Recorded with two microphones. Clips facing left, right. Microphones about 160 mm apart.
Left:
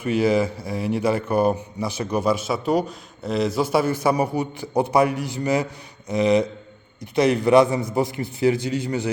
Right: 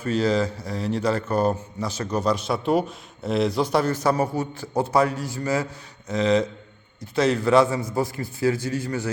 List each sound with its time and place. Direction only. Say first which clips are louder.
0.0 s a man's voice: left 2 dB; 10° left (ahead or behind)